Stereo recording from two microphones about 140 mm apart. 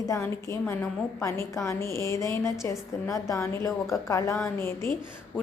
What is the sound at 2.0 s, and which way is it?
A woman's voice, 20° left (ahead or behind).